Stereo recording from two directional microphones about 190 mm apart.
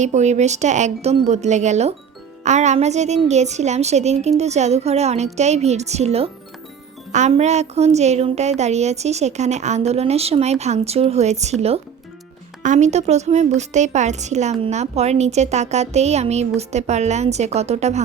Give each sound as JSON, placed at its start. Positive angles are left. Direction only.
{"t": 0.0, "sound": "a woman's voice", "side_deg": -35}
{"t": 12.6, "sound": "a woman's voice", "side_deg": -40}